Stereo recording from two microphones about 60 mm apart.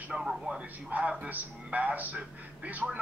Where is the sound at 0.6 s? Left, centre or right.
Right.